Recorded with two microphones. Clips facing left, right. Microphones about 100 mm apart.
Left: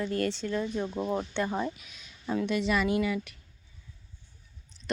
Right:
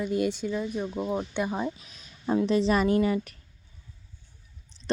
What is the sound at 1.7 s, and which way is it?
Speech, 35° right (ahead or behind).